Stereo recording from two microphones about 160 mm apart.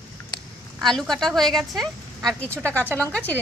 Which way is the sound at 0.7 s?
Centre (ahead or behind).